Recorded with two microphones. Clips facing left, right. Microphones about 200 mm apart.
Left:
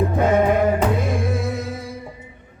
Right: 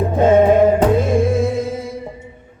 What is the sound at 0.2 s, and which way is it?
Music, 25° right (ahead or behind).